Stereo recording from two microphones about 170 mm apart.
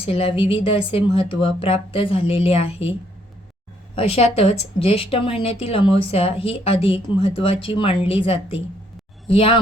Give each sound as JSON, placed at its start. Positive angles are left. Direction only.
{"t": 0.0, "sound": "speech", "side_deg": 35}
{"t": 3.9, "sound": "speech", "side_deg": 35}